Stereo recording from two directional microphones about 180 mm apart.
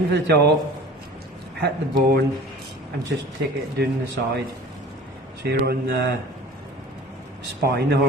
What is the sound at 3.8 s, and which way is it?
Speech, 65° right (ahead or behind).